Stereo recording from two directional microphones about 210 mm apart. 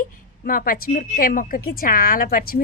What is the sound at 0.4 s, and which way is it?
Speech, 45° left (ahead or behind).